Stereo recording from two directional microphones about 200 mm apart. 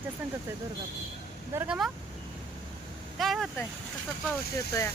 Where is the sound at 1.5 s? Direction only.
10° right (ahead or behind).